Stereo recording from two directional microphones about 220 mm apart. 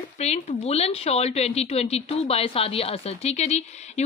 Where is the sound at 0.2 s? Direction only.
30° left (ahead or behind).